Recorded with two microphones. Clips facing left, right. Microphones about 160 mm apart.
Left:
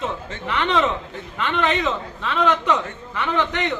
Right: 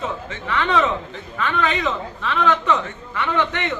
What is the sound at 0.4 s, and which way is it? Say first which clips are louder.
A woman's voice: right 1 dB; 20° left (ahead or behind).